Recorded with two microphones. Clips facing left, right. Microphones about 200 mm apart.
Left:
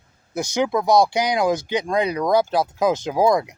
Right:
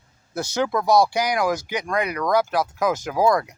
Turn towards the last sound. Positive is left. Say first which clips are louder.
# left 2 dB
turn(degrees=20)  # may be behind; listen again after turning